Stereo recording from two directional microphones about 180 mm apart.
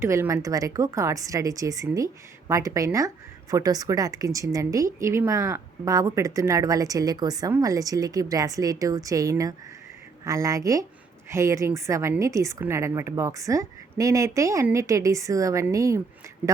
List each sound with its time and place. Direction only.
0.0 s a woman's voice: 15° right (ahead or behind)